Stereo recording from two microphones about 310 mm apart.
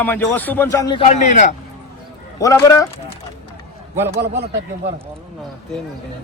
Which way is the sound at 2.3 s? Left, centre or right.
Centre.